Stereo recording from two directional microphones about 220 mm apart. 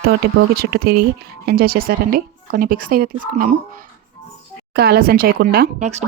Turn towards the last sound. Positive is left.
turn(degrees=-30)  # may be behind; listen again after turning